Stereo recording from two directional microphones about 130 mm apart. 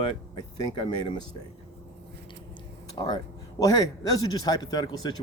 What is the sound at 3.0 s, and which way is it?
Speech, 35° left (ahead or behind).